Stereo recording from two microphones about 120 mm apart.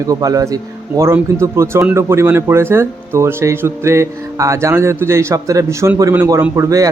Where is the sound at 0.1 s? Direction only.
30° right (ahead or behind).